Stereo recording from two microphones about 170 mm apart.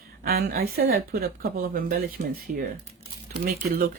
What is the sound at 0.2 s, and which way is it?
Speech, 65° right (ahead or behind).